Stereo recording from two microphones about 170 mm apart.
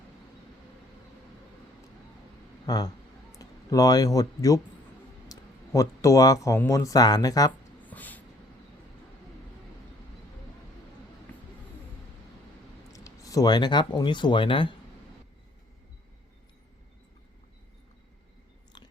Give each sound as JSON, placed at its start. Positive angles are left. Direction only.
{"t": 2.6, "sound": "speech", "side_deg": 25}
{"t": 7.9, "sound": "a sound", "side_deg": 10}
{"t": 12.9, "sound": "speech", "side_deg": 20}
{"t": 18.7, "sound": "biting", "side_deg": 25}